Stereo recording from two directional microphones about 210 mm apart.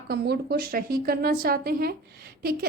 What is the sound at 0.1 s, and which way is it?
A woman's voice, 50° right (ahead or behind).